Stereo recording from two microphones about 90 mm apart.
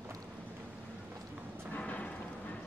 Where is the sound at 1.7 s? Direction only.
15° left (ahead or behind).